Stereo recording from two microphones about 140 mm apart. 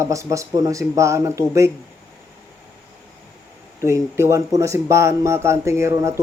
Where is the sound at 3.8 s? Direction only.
20° right (ahead or behind).